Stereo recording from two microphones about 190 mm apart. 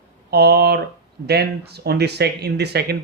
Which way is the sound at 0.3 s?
60° right (ahead or behind).